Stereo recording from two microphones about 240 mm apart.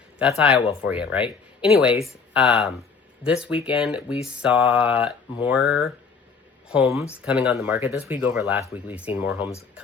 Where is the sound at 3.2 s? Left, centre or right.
Centre.